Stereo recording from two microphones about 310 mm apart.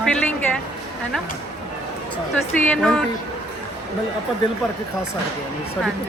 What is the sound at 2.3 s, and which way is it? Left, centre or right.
Speech, centre.